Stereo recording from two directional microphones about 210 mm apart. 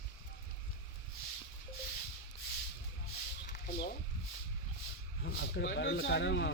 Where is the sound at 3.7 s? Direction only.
55° left (ahead or behind).